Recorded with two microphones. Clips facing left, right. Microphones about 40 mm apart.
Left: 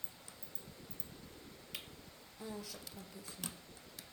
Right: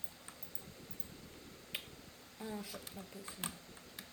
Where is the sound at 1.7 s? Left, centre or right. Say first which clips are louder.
Right 4 dB; right.